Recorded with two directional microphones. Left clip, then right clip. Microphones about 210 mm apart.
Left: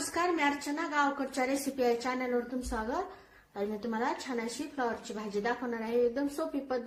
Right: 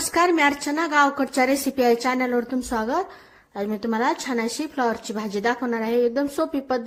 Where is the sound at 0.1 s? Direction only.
40° right (ahead or behind).